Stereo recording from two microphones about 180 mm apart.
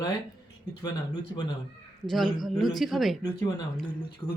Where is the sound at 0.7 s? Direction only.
25° left (ahead or behind).